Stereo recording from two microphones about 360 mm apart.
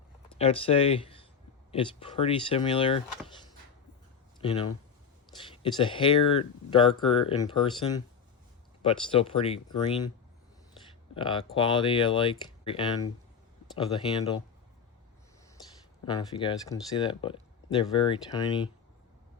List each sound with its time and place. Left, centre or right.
0.3 s speech: centre
4.4 s speech: centre
11.1 s speech: centre
16.0 s speech: centre